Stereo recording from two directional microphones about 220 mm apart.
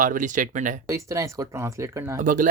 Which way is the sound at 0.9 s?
15° right (ahead or behind).